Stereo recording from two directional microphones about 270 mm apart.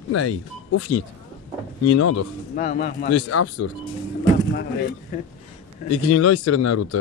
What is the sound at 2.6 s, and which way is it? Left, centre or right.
Speech, left.